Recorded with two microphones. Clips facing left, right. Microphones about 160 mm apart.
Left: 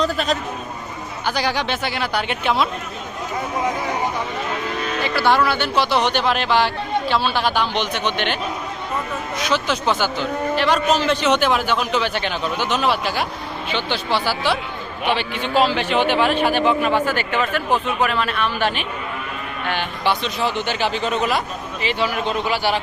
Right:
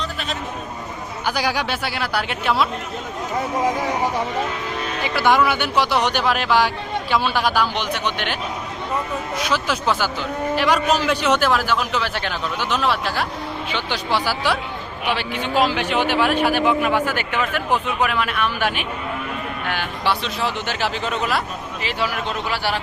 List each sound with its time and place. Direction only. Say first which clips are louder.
0.0 s a sound: left 8 dB; 40° left (ahead or behind)
1.2 s a man's voice: left 1 dB; 10° right (ahead or behind)
5.0 s a man's voice: right 1 dB; 15° right (ahead or behind)
9.4 s a man's voice: left 2 dB; 5° right (ahead or behind)
13.7 s a man's voice: left 2 dB; 10° right (ahead or behind)
20.1 s a man's voice: left 2 dB; centre (ahead or behind)